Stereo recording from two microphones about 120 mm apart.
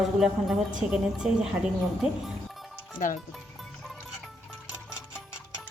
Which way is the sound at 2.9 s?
90° left.